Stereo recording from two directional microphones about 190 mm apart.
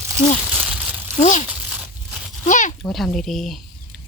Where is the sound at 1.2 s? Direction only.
40° left (ahead or behind).